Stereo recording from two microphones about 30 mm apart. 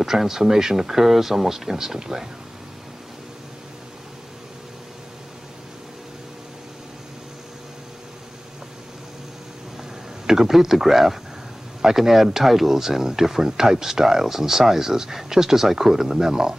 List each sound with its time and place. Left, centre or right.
0.0 s speech: centre
10.2 s speech: centre